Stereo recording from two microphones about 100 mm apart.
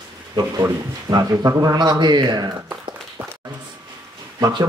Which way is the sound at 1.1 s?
35° right (ahead or behind).